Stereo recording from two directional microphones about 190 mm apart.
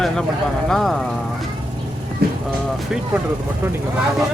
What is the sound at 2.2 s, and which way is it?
Vehicle, 55° right (ahead or behind).